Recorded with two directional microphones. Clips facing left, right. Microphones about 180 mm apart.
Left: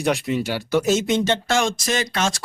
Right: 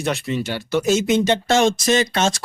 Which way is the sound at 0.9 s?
5° right (ahead or behind).